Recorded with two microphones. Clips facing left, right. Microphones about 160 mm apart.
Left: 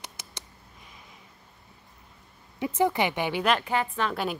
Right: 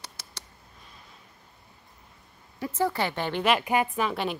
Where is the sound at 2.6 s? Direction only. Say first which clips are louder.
Left 2 dB; 20° left (ahead or behind).